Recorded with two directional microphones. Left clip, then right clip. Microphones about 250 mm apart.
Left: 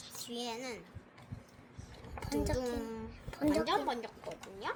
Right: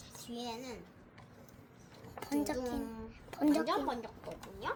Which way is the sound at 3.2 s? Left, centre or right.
Right.